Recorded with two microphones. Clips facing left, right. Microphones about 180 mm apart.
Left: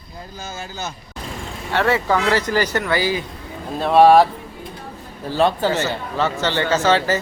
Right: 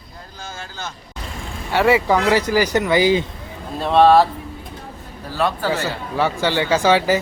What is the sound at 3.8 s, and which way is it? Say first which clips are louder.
Speech: left 1 dB; 10° left (ahead or behind).